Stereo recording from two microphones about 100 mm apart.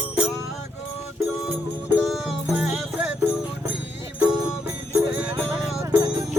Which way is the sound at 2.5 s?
10° right (ahead or behind).